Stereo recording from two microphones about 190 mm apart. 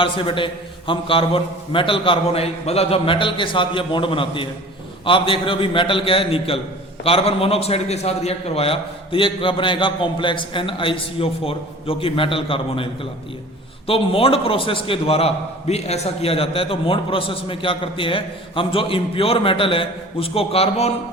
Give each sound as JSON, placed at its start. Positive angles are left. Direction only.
{"t": 0.0, "sound": "a man's voice", "side_deg": 25}